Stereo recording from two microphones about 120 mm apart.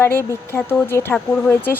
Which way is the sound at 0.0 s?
20° left (ahead or behind).